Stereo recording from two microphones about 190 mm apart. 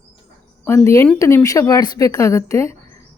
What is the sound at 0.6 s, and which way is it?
Speech, 10° left (ahead or behind).